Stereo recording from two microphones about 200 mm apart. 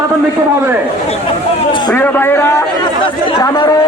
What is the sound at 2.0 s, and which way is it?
Speech, 10° left (ahead or behind).